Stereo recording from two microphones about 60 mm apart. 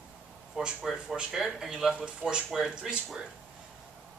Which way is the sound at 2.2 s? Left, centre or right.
Centre.